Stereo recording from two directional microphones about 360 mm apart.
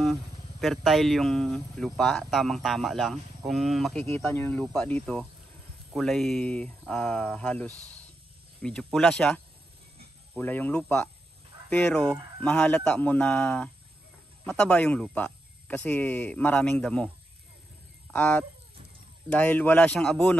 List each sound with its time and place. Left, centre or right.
0.0 s speech: centre